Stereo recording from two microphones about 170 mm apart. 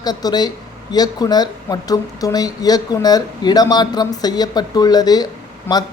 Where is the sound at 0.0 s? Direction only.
25° left (ahead or behind).